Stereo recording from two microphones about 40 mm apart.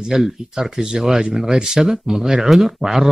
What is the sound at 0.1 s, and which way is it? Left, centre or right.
Speech, centre.